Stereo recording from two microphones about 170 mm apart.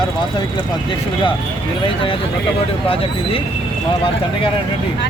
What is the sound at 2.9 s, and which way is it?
Speech, 35° left (ahead or behind).